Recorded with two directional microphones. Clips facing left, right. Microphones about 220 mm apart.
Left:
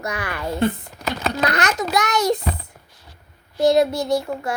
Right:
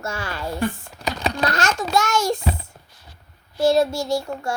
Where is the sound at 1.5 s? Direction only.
20° left (ahead or behind).